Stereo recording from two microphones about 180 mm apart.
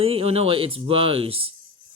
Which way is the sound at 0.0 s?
30° right (ahead or behind).